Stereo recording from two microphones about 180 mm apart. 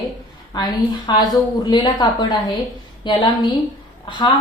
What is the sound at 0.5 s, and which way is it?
A woman's voice, 20° left (ahead or behind).